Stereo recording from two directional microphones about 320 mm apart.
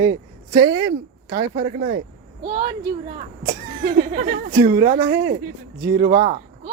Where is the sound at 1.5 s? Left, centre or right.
Right.